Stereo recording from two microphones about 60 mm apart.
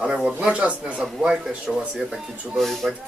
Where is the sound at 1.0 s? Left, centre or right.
Centre.